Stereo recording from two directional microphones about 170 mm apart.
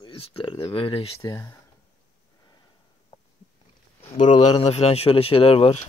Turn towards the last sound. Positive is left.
turn(degrees=35)  # may be behind; listen again after turning